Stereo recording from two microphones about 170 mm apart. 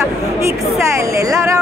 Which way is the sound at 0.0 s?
15° right (ahead or behind).